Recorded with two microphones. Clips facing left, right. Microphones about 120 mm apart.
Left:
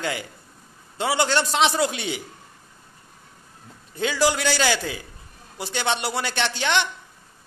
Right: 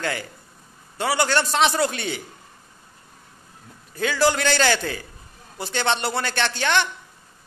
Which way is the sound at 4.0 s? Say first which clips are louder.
Right 1 dB; 15° left (ahead or behind).